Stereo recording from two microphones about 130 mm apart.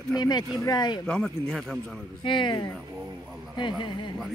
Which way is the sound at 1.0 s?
5° left (ahead or behind).